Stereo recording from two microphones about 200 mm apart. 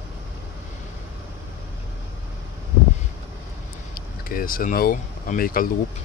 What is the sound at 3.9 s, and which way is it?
Speech, 45° left (ahead or behind).